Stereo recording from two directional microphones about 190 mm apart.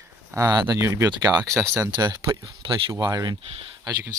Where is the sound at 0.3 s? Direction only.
15° right (ahead or behind).